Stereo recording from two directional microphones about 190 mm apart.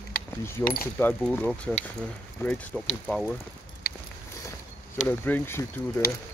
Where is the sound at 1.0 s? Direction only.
10° left (ahead or behind).